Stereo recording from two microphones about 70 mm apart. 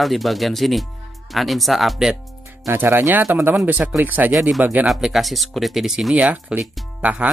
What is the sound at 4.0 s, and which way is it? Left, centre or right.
Speech, right.